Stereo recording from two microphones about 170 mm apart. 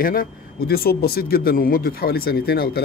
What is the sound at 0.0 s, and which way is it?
A man's voice, 55° left (ahead or behind).